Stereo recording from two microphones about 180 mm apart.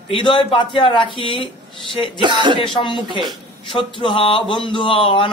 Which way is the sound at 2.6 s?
25° left (ahead or behind).